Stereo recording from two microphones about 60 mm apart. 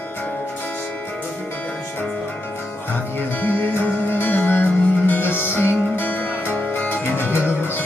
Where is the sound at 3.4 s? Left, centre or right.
Left.